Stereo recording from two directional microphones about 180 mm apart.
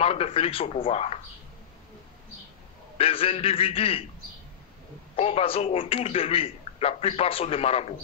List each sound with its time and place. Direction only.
0.0 s a man's voice: 35° left (ahead or behind)
3.0 s a man's voice: 30° left (ahead or behind)
5.1 s a man's voice: 35° left (ahead or behind)